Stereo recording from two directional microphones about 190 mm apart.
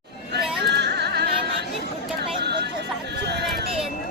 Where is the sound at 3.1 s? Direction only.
60° right (ahead or behind).